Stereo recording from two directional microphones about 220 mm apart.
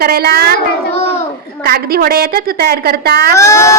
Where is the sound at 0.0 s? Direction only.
45° right (ahead or behind).